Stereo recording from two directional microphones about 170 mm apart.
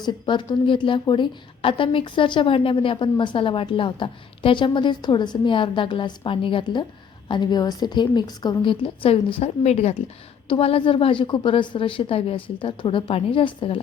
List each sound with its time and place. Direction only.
0.0 s a woman's voice: 25° left (ahead or behind)